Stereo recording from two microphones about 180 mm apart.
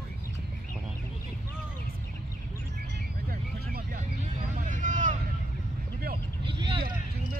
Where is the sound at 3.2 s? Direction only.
55° right (ahead or behind).